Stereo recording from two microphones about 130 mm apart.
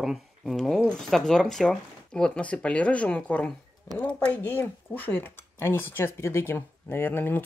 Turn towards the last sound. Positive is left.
turn(degrees=15)  # may be behind; listen again after turning